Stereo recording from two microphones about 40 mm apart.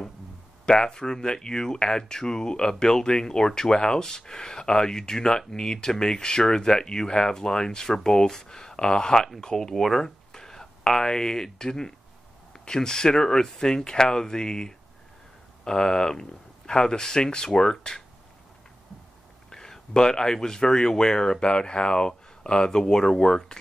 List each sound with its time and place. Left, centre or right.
0.7 s speech: centre
19.5 s speech: centre